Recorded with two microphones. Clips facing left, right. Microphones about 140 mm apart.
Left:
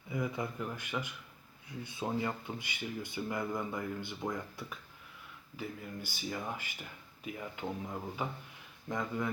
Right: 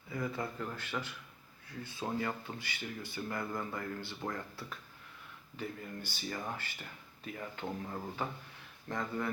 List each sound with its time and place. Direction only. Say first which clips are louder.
0.1 s speech: left 1 dB; 15° left (ahead or behind)